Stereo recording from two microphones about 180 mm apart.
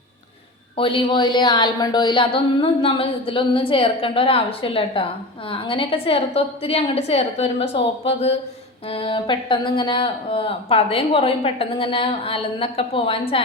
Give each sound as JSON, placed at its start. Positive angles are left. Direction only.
{"t": 0.8, "sound": "a woman's voice", "side_deg": 30}